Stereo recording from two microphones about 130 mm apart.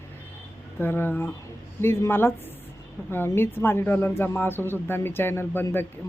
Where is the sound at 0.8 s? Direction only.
15° left (ahead or behind).